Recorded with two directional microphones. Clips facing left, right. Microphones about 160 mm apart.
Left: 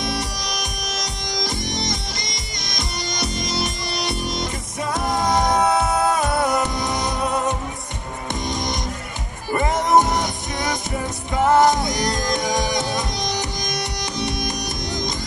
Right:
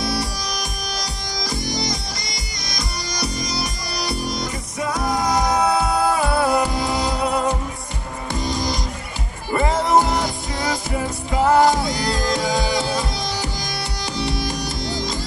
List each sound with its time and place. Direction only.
0.0 s music: 20° left (ahead or behind)
9.8 s music: 20° left (ahead or behind)